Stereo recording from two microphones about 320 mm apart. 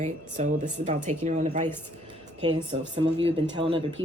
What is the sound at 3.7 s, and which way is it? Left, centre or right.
Speech, centre.